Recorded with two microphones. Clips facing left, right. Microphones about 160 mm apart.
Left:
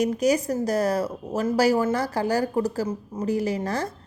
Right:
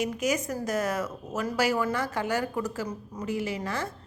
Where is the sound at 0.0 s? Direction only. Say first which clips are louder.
Left 6 dB; 40° left (ahead or behind).